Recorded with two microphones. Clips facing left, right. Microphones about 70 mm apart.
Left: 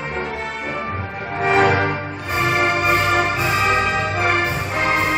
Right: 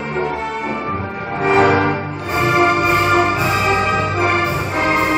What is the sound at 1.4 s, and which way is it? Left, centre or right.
Music, centre.